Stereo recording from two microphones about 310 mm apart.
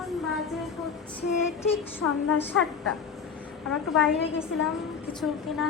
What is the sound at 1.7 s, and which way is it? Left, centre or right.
Speech, left.